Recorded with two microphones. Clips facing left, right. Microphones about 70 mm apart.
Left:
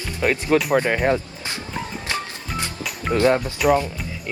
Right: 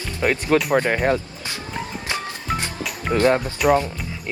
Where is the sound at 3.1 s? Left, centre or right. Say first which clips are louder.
Even; centre.